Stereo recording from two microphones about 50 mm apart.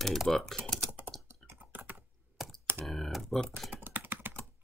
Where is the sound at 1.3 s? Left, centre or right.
Right.